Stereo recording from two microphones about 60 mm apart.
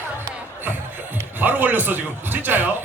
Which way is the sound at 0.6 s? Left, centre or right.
Right.